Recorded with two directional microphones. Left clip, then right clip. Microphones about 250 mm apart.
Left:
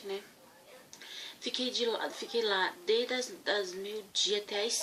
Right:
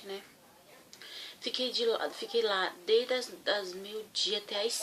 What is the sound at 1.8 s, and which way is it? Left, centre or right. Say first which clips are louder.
A woman's voice: right 2 dB; centre.